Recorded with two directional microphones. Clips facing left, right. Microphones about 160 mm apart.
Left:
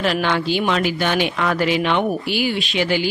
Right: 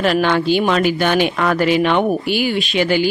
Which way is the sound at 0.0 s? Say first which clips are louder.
Right 4 dB; 50° right (ahead or behind).